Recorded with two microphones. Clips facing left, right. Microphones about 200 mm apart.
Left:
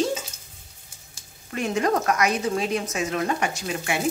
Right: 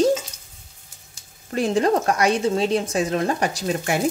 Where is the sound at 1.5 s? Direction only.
35° right (ahead or behind).